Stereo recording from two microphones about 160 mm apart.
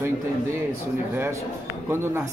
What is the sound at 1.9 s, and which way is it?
Speech, 15° right (ahead or behind).